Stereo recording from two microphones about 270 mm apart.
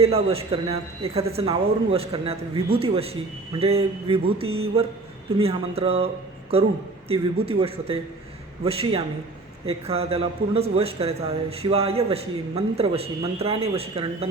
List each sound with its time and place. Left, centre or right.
0.0 s a man's voice: right
4.4 s mantra: right
5.4 s a man's voice: right